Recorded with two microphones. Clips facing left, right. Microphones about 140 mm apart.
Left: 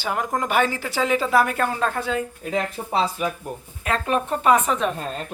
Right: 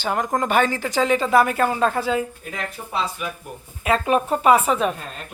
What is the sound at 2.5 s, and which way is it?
Speech, 30° left (ahead or behind).